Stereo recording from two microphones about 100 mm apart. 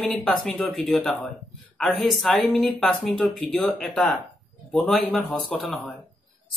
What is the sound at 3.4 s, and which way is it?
Speech, 10° left (ahead or behind).